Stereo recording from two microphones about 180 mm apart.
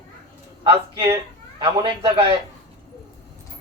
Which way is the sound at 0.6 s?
30° right (ahead or behind).